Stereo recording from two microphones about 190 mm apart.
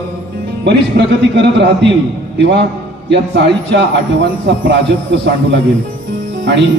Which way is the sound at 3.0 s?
65° right (ahead or behind).